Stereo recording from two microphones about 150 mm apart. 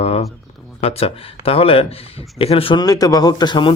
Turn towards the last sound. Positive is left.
turn(degrees=30)  # may be behind; listen again after turning